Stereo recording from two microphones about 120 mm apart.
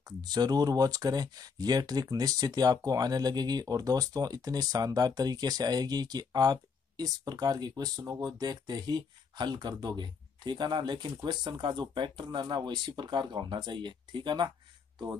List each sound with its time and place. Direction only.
0.0 s speech: 35° right (ahead or behind)